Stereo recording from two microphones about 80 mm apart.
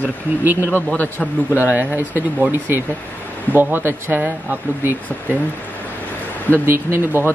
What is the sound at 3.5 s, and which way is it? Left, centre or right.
Speech, right.